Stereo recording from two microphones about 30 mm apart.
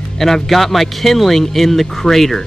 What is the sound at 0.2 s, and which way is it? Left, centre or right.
Speech, centre.